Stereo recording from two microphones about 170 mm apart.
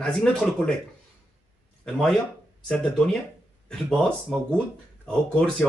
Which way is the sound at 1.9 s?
Centre (ahead or behind).